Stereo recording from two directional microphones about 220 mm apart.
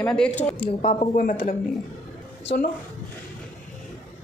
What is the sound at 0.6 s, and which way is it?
Speech, 25° left (ahead or behind).